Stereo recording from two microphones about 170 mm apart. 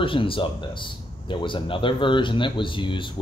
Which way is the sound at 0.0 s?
30° left (ahead or behind).